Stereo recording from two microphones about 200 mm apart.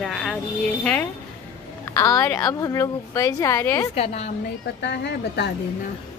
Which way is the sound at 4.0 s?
30° left (ahead or behind).